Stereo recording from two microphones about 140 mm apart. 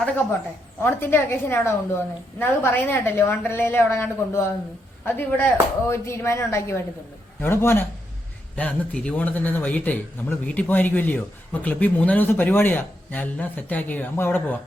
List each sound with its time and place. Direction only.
0.8 s a man's voice: 15° left (ahead or behind)